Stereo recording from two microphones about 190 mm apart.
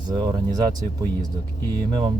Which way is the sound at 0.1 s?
20° right (ahead or behind).